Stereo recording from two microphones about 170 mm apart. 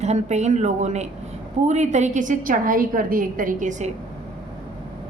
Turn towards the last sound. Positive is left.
turn(degrees=-45)  # may be behind; listen again after turning